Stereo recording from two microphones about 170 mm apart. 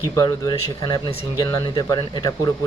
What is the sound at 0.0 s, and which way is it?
Speech, 20° left (ahead or behind).